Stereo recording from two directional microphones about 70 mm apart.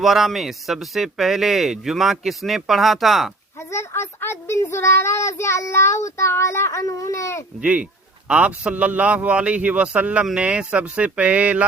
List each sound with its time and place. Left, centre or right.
0.0 s a man's voice: centre
3.6 s speech: left
7.6 s a man's voice: centre